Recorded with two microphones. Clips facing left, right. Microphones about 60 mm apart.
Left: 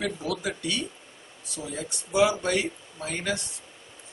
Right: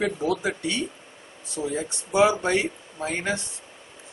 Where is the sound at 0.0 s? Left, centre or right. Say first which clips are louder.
Right 5 dB; right.